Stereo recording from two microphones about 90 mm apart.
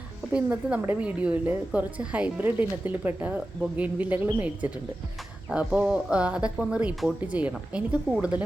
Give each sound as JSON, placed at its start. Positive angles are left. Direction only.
{"t": 0.3, "sound": "a woman's voice", "side_deg": -15}